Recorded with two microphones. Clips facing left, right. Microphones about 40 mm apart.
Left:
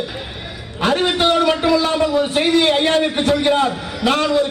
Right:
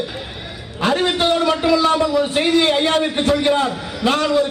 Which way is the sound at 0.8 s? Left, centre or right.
Left.